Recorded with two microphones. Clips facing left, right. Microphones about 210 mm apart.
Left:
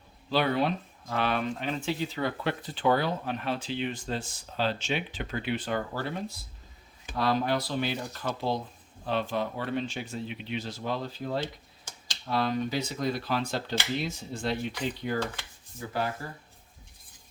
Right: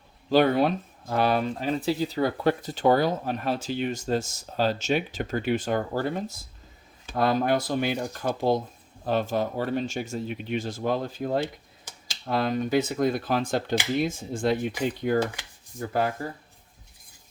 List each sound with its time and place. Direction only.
0.3 s speech: 45° right (ahead or behind)